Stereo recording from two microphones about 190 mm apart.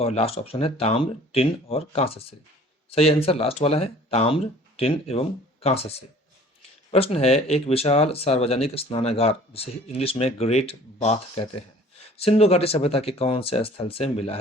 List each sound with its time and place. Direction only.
0.0 s speech: 30° left (ahead or behind)